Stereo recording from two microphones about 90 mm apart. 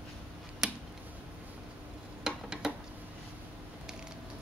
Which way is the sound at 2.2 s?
5° right (ahead or behind).